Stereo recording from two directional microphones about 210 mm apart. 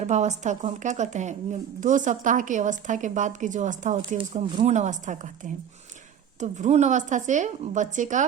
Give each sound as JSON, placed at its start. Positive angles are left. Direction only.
{"t": 0.0, "sound": "a woman's voice", "side_deg": -35}